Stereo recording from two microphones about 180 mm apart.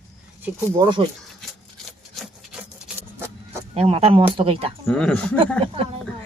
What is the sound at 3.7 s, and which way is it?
Speech, 35° right (ahead or behind).